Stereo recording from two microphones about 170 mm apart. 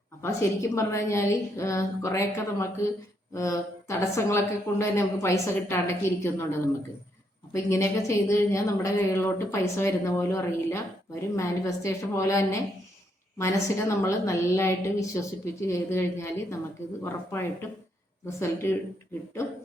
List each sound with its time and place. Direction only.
0.2 s a woman's voice: 15° left (ahead or behind)